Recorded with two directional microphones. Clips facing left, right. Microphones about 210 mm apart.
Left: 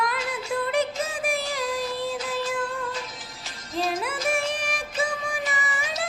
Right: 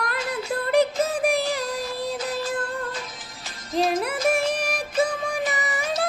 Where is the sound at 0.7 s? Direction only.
35° right (ahead or behind).